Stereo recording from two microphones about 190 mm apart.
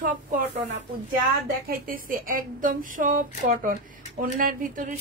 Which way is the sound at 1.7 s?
50° right (ahead or behind).